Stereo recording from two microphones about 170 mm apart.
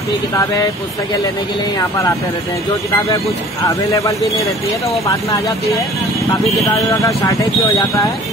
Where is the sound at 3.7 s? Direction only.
20° left (ahead or behind).